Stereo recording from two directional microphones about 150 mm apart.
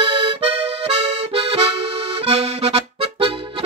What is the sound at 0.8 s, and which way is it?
Accordion, 45° right (ahead or behind).